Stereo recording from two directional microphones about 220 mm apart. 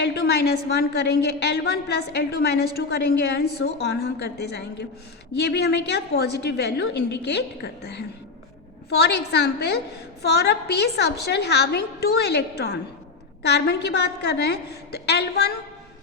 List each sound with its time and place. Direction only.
0.0 s a woman's voice: 45° left (ahead or behind)